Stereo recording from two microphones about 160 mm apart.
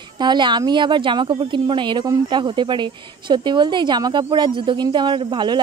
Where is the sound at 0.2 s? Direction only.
30° right (ahead or behind).